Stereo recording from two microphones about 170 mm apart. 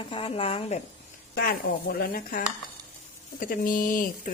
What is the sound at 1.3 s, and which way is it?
Speech, 65° left (ahead or behind).